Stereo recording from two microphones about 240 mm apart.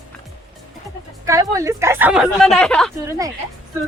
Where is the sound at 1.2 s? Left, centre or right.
Centre.